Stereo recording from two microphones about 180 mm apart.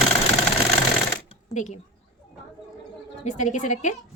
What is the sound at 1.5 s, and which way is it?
Speech, 40° left (ahead or behind).